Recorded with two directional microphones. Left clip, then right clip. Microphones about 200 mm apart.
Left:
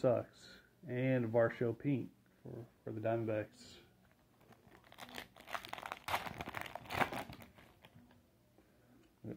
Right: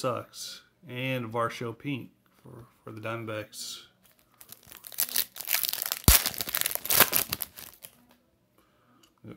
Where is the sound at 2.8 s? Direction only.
35° right (ahead or behind).